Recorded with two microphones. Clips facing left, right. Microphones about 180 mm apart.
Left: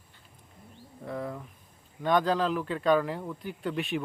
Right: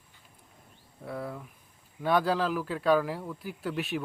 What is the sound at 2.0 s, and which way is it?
Speech, 5° right (ahead or behind).